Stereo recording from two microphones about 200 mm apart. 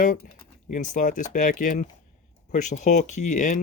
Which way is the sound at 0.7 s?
40° left (ahead or behind).